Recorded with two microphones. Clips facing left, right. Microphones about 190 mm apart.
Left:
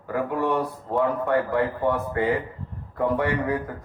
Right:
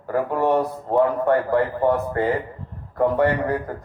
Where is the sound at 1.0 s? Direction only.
45° right (ahead or behind).